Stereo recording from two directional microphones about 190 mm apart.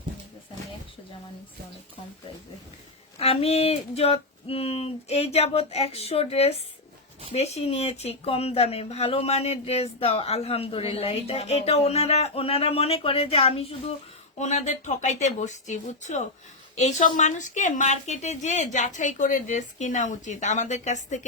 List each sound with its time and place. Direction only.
3.2 s speech: 30° left (ahead or behind)